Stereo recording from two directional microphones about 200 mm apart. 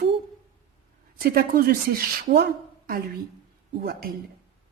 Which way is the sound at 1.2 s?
45° right (ahead or behind).